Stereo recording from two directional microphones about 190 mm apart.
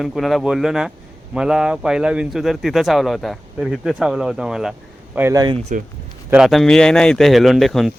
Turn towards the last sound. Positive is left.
turn(degrees=0)  # may be behind; listen again after turning